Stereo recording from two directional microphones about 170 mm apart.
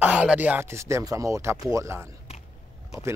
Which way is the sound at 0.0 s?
5° right (ahead or behind).